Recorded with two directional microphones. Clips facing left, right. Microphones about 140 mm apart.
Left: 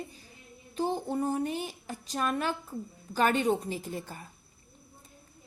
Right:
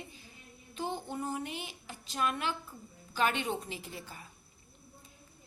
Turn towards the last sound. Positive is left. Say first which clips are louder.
# left 7 dB
turn(degrees=45)  # may be behind; listen again after turning